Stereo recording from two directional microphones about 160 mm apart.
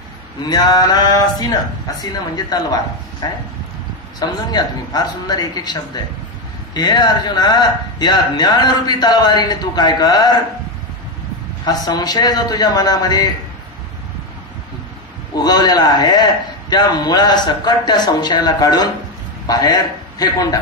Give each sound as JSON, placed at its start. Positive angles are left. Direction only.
{"t": 0.5, "sound": "a man's voice", "side_deg": 25}
{"t": 11.6, "sound": "a man's voice", "side_deg": 25}
{"t": 15.3, "sound": "a man's voice", "side_deg": 25}